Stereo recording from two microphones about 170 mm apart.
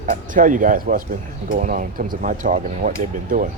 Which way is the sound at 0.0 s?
50° right (ahead or behind).